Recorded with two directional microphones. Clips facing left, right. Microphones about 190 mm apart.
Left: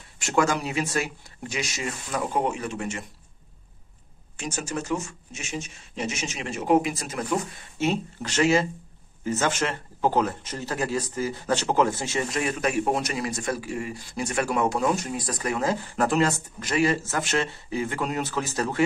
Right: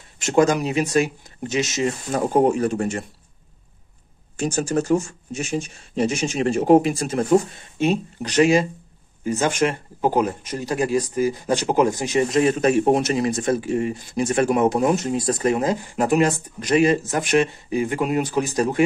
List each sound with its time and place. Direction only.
0.2 s speech: 20° right (ahead or behind)
2.0 s speech: 40° right (ahead or behind)
4.4 s speech: 35° right (ahead or behind)
7.8 s speech: 15° right (ahead or behind)